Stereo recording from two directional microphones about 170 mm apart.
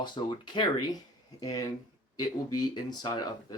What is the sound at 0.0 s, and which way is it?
Speech, 25° left (ahead or behind).